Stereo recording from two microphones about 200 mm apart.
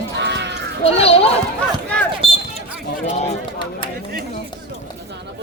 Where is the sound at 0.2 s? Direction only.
60° right (ahead or behind).